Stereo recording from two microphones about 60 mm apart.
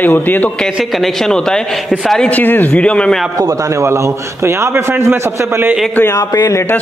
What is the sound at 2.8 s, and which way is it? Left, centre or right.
Speech, centre.